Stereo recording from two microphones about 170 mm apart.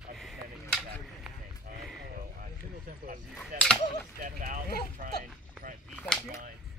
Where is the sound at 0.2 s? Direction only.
Centre (ahead or behind).